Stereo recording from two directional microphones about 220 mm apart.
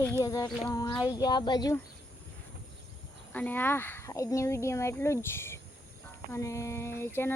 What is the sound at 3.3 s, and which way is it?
Speech, 10° left (ahead or behind).